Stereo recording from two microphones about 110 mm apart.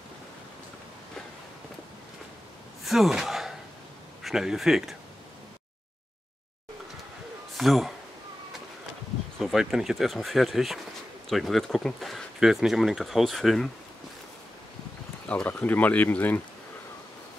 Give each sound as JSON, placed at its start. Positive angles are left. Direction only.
{"t": 2.8, "sound": "sigh", "side_deg": 0}
{"t": 4.2, "sound": "speech", "side_deg": -5}
{"t": 7.5, "sound": "speech", "side_deg": 0}
{"t": 9.4, "sound": "speech", "side_deg": 0}
{"t": 15.2, "sound": "speech", "side_deg": 15}